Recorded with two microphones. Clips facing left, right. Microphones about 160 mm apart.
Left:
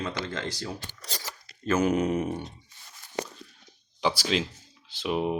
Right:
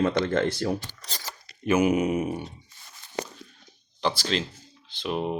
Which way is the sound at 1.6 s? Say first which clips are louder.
Right 2 dB; 10° right (ahead or behind).